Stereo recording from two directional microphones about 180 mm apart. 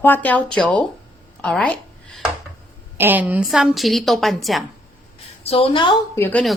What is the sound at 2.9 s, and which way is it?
A woman's voice, 10° right (ahead or behind).